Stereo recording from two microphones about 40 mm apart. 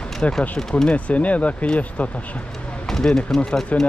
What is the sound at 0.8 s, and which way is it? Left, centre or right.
Speech, left.